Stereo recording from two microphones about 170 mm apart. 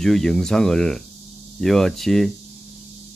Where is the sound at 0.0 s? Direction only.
Centre (ahead or behind).